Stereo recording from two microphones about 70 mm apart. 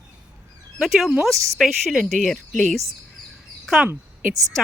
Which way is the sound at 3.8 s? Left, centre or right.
Centre.